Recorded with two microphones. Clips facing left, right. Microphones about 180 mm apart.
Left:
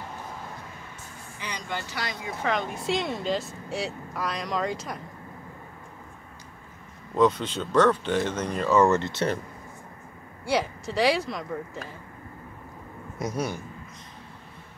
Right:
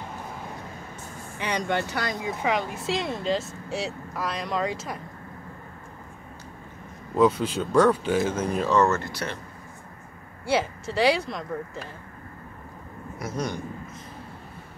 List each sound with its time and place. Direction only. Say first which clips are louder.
1.4 s speech: right 8 dB; 65° right (ahead or behind)
2.4 s speech: even; 5° right (ahead or behind)
7.2 s speech: right 1 dB; 5° right (ahead or behind)
8.7 s speech: left 3 dB; 15° left (ahead or behind)
10.4 s speech: right 1 dB; centre (ahead or behind)
13.2 s speech: left 1 dB; 10° left (ahead or behind)